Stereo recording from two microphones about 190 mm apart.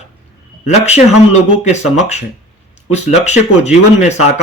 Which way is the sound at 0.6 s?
35° left (ahead or behind).